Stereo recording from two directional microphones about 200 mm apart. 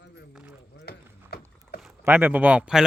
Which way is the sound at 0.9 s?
50° left (ahead or behind).